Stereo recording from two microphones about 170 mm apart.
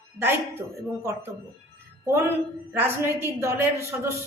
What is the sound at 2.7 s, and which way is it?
A woman's voice, 15° right (ahead or behind).